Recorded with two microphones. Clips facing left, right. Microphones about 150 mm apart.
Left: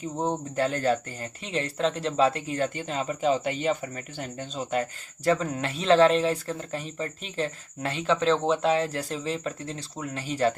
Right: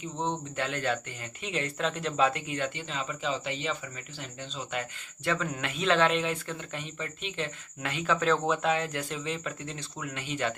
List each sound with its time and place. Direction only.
0.2 s speech: 40° left (ahead or behind)